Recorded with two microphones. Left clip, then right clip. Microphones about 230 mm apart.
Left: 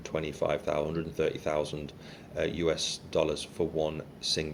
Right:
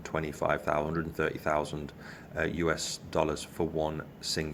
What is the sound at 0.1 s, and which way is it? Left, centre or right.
Speech, right.